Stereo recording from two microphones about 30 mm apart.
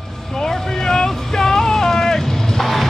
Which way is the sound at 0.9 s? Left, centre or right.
Left.